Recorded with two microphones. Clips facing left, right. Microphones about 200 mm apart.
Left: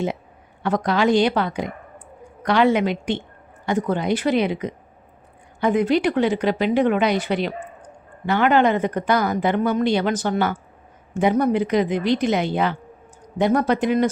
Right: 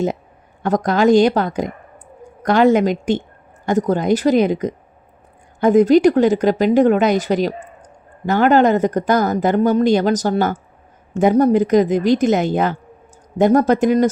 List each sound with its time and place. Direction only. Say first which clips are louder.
0.6 s speech: right 4 dB; 45° right (ahead or behind)